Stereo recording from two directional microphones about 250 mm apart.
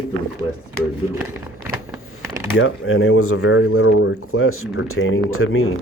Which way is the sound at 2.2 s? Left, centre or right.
Centre.